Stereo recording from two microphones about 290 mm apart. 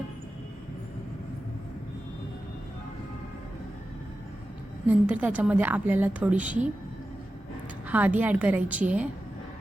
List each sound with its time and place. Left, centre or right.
4.9 s a woman's voice: centre
7.9 s a woman's voice: centre